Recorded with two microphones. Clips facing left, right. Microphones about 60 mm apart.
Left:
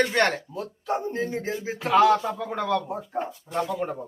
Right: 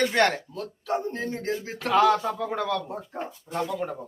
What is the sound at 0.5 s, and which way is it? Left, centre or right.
Speech, centre.